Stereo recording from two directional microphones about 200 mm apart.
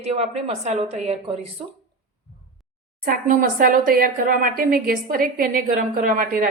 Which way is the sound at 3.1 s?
40° right (ahead or behind).